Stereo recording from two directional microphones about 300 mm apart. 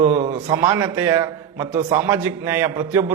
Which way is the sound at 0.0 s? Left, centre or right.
Right.